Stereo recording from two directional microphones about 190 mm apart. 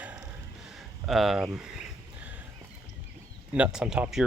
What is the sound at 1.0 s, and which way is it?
Speech, centre (ahead or behind).